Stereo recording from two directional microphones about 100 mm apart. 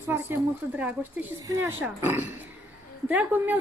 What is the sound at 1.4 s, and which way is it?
Speech, 30° right (ahead or behind).